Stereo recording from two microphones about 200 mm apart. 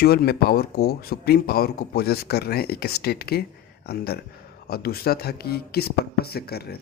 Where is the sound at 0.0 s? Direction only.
50° left (ahead or behind).